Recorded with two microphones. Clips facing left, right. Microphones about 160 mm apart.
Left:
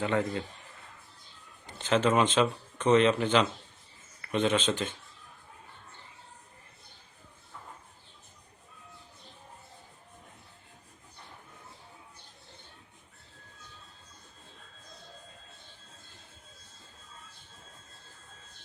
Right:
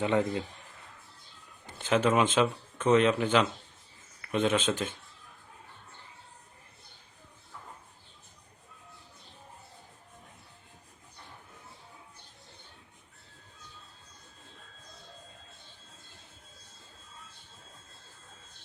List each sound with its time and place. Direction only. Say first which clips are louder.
0.0 s a man's voice: right 2 dB; 20° right (ahead or behind)
1.9 s speech: even; 5° right (ahead or behind)